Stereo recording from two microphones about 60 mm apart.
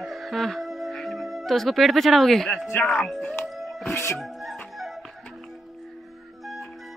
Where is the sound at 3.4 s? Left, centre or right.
Centre.